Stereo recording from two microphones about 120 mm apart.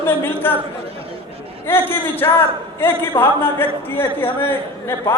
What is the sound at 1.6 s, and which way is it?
A man's voice, 20° left (ahead or behind).